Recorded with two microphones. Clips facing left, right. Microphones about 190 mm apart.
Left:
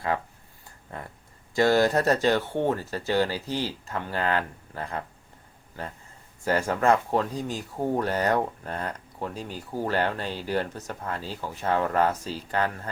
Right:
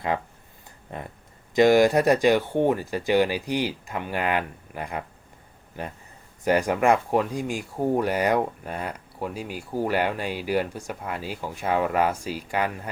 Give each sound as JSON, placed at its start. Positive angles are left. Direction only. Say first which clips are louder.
{"t": 0.1, "sound": "speech", "louder": "right 1 dB", "side_deg": -20}
{"t": 6.4, "sound": "speech", "louder": "right 3 dB", "side_deg": -15}